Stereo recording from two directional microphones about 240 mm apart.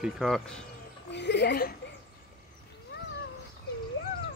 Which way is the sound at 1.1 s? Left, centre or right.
Left.